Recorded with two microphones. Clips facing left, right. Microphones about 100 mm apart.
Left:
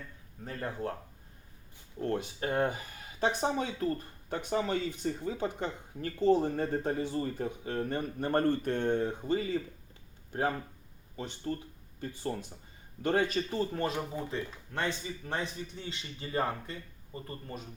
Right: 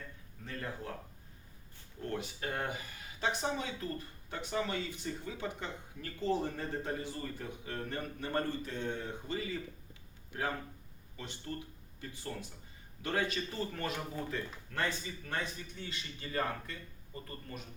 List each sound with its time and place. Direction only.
0.4 s speech: 40° left (ahead or behind)
2.0 s speech: 35° left (ahead or behind)
8.2 s speech: 50° left (ahead or behind)
11.9 s speech: 40° left (ahead or behind)
13.5 s speech: 30° left (ahead or behind)